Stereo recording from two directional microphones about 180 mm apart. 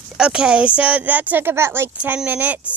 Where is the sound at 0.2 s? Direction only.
5° right (ahead or behind).